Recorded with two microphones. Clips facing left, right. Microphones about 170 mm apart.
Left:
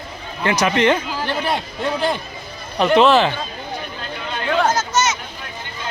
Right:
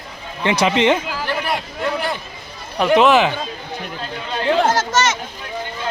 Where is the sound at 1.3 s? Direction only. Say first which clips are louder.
Left 1 dB; 25° left (ahead or behind).